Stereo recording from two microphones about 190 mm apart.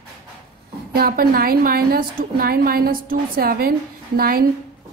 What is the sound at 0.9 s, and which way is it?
A woman's voice, 50° right (ahead or behind).